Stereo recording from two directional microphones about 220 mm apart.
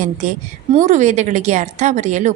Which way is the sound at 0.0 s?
35° right (ahead or behind).